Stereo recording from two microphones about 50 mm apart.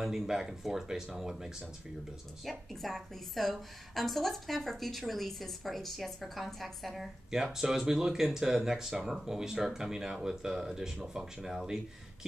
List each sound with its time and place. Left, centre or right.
0.0 s speech: centre
2.4 s a woman's voice: centre
7.6 s speech: centre